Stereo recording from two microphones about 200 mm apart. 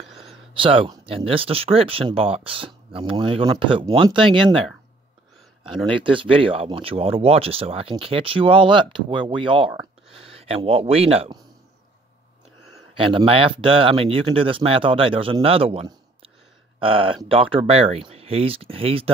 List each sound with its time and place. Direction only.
0.0 s a sound: centre (ahead or behind)
0.6 s speech: 25° right (ahead or behind)
6.0 s speech: 25° right (ahead or behind)
13.0 s speech: 25° right (ahead or behind)